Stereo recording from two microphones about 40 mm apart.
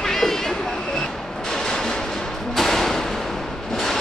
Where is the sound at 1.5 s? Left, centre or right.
Centre.